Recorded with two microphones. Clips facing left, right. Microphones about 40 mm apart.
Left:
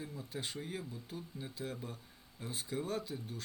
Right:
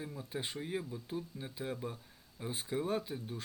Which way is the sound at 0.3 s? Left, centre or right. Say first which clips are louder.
Right 4 dB; centre.